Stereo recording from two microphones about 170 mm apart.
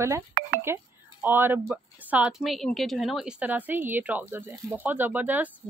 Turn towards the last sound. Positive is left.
turn(degrees=-10)  # may be behind; listen again after turning